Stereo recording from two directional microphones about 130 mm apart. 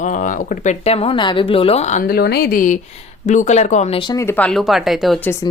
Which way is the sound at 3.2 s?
65° left (ahead or behind).